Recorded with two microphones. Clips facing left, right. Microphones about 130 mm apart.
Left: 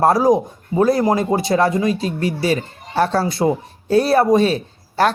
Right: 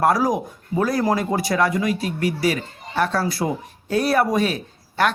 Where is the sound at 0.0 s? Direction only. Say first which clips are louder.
Left 5 dB; 25° left (ahead or behind).